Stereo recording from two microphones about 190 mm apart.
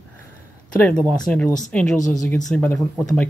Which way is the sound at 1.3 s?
5° left (ahead or behind).